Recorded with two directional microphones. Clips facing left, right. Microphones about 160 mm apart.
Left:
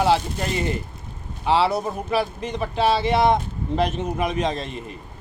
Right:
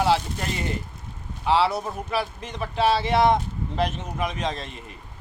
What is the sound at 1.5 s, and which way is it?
Speech, centre (ahead or behind).